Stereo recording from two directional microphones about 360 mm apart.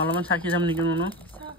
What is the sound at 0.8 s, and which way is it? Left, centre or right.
Speech, right.